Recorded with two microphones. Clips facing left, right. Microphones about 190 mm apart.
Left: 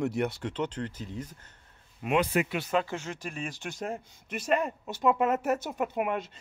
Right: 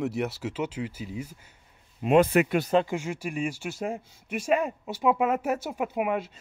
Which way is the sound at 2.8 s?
10° right (ahead or behind).